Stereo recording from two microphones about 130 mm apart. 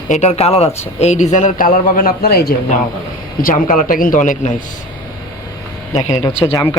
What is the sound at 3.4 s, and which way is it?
A man's voice, 90° left.